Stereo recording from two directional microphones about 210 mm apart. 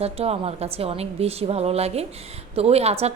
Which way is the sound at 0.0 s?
30° right (ahead or behind).